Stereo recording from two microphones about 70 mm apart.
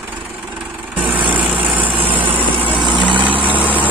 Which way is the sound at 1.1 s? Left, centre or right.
Right.